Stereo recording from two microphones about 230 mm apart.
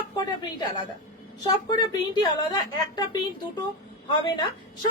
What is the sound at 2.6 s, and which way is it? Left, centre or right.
A woman's voice, centre.